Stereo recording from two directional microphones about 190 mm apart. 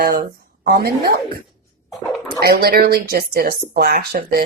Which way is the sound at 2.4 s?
55° right (ahead or behind).